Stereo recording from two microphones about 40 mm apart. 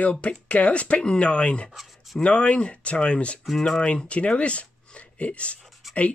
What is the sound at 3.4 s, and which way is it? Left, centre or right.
Speech, centre.